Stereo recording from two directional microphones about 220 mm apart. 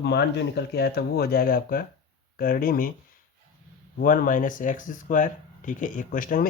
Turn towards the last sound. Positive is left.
turn(degrees=40)  # may be behind; listen again after turning